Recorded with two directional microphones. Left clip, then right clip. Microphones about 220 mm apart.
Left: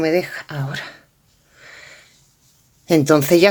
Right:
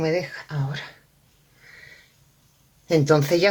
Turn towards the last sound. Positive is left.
turn(degrees=35)  # may be behind; listen again after turning